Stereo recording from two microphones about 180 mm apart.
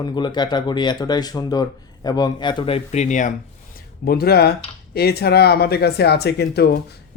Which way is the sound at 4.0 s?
60° left (ahead or behind).